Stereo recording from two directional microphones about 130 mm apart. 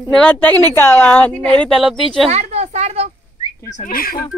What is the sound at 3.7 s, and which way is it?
Speech, 90° left.